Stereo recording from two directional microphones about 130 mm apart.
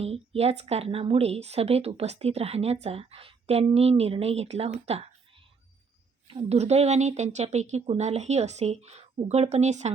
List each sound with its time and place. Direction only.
0.0 s a woman's voice: 50° right (ahead or behind)
6.2 s speech: 45° right (ahead or behind); by 9.9 s 60° right (ahead or behind)